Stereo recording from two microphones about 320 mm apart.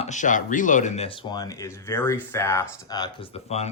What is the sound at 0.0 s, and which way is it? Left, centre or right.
Speech, left.